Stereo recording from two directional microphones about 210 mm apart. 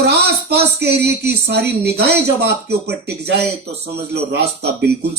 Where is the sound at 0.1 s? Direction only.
50° right (ahead or behind).